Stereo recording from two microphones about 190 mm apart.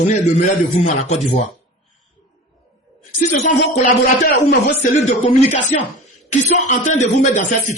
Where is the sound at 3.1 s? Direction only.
35° left (ahead or behind).